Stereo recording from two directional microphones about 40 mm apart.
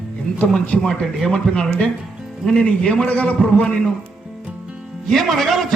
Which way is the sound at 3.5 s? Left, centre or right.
Left.